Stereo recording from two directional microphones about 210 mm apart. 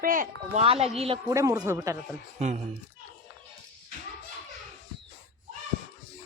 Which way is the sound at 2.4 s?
30° right (ahead or behind).